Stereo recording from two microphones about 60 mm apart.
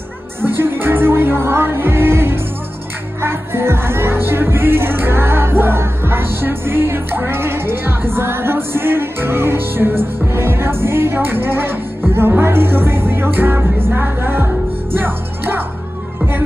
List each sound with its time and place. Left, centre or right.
0.4 s music: right